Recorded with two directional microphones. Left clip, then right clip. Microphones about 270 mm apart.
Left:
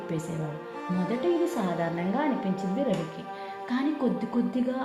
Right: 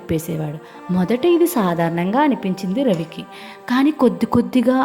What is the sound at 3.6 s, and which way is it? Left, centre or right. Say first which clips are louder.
Speech: right 13 dB; right.